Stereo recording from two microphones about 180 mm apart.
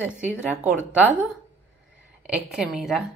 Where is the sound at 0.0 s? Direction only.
5° right (ahead or behind).